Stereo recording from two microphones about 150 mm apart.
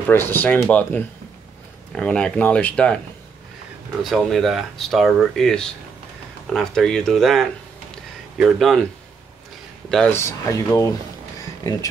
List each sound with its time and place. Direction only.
0.1 s speech: 15° left (ahead or behind)
4.0 s speech: centre (ahead or behind)
9.8 s speech: 5° left (ahead or behind)
10.1 s speech: 15° left (ahead or behind)